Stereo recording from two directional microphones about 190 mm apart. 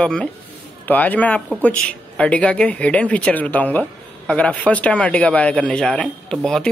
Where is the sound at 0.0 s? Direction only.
5° left (ahead or behind).